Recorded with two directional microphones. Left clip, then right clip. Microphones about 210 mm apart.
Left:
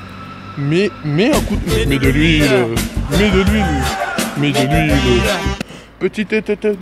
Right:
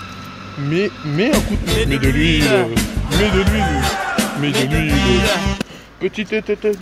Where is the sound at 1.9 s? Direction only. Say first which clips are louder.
Left 5 dB; 15° left (ahead or behind).